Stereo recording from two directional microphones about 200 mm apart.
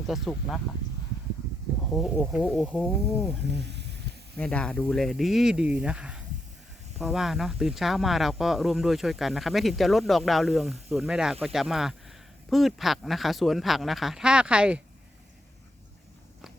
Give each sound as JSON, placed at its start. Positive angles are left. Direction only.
{"t": 0.1, "sound": "speech", "side_deg": 0}
{"t": 1.9, "sound": "speech", "side_deg": 5}
{"t": 3.6, "sound": "a sound", "side_deg": -60}
{"t": 4.4, "sound": "speech", "side_deg": 5}